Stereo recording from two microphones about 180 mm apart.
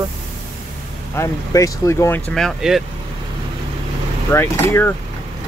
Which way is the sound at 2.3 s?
Centre (ahead or behind).